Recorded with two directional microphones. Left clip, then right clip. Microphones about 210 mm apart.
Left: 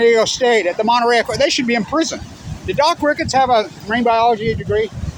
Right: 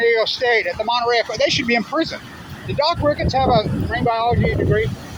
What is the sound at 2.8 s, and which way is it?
Speech, 35° left (ahead or behind).